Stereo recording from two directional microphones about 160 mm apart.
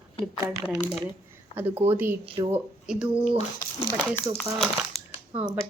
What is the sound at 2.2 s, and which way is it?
Speech, 35° right (ahead or behind).